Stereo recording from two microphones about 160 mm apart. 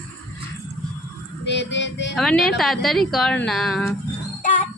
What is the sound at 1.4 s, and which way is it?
Child singing, 90° left.